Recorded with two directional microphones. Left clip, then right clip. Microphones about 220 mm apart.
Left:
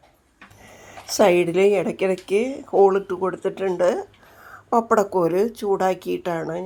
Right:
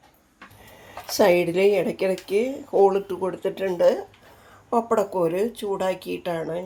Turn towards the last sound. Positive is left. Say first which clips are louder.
# left 2 dB
turn(degrees=20)  # may be behind; listen again after turning